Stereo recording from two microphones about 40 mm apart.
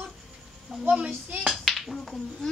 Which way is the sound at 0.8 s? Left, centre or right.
Right.